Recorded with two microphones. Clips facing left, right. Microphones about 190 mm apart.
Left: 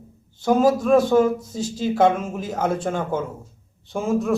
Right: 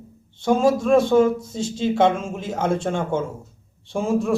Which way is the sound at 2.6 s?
25° right (ahead or behind).